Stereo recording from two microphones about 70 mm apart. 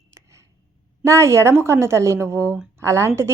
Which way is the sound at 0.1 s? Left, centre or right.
Right.